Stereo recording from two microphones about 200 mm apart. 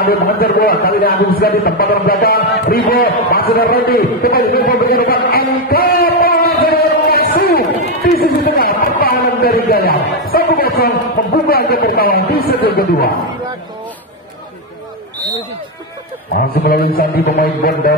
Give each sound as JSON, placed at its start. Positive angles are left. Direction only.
{"t": 0.0, "sound": "a man's voice", "side_deg": 50}
{"t": 8.2, "sound": "a sound", "side_deg": 50}
{"t": 11.3, "sound": "speech", "side_deg": 50}
{"t": 16.4, "sound": "speech", "side_deg": 50}